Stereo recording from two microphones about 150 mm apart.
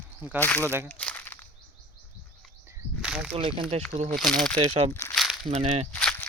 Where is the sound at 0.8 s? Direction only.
10° left (ahead or behind).